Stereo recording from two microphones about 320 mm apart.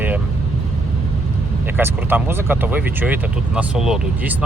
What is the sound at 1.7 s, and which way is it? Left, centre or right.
Speech, centre.